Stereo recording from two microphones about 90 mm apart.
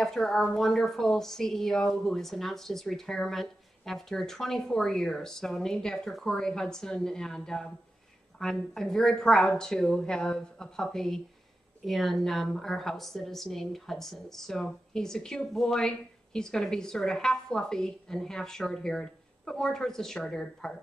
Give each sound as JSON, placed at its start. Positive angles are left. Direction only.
{"t": 0.0, "sound": "a woman's voice", "side_deg": 5}